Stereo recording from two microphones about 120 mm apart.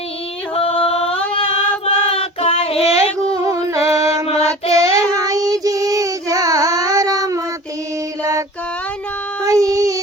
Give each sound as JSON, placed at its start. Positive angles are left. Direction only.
{"t": 0.5, "sound": "music", "side_deg": 55}
{"t": 0.9, "sound": "singing", "side_deg": 55}
{"t": 1.8, "sound": "music", "side_deg": 55}
{"t": 3.3, "sound": "music", "side_deg": -30}
{"t": 4.3, "sound": "child singing", "side_deg": 60}
{"t": 4.7, "sound": "child singing", "side_deg": -25}
{"t": 8.2, "sound": "mantra", "side_deg": -30}
{"t": 9.4, "sound": "child singing", "side_deg": -30}